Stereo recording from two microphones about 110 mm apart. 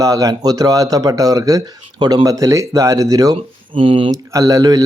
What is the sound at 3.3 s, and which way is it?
Speech, 55° right (ahead or behind).